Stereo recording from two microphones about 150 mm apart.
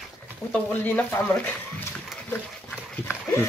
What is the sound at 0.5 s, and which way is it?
Speech, 10° left (ahead or behind).